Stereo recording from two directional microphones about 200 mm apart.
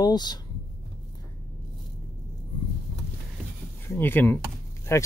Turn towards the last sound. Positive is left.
turn(degrees=15)  # may be behind; listen again after turning